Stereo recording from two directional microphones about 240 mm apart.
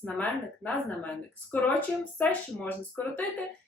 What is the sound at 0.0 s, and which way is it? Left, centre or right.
Speech, centre.